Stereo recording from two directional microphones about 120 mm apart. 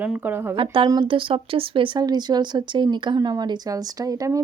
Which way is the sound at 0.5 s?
45° right (ahead or behind).